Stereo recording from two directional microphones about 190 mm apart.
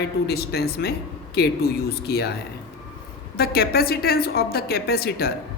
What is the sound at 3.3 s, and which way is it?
A woman's voice, 55° left (ahead or behind).